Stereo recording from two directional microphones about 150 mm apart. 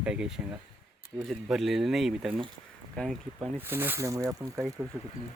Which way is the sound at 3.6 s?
15° right (ahead or behind).